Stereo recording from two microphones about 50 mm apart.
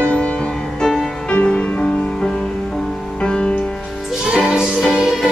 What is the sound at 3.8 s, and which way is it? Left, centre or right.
Music, centre.